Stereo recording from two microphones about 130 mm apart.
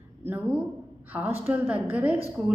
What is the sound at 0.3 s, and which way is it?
Speech, 15° right (ahead or behind).